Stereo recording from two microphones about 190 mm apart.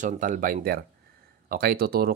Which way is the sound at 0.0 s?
45° right (ahead or behind).